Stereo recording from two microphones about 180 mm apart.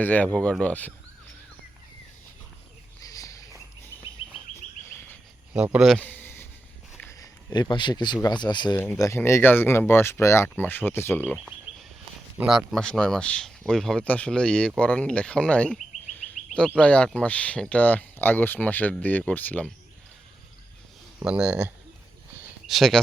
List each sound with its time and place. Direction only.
0.0 s speech: 10° left (ahead or behind)
3.0 s cricket: 20° left (ahead or behind)
5.5 s speech: 5° right (ahead or behind); by 8.7 s 25° left (ahead or behind)
8.7 s speech: 10° left (ahead or behind)
11.3 s a sound: 5° right (ahead or behind)
12.4 s speech: 5° right (ahead or behind)
21.2 s speech: 5° right (ahead or behind)